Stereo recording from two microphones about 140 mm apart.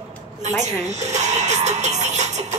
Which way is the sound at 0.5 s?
55° right (ahead or behind).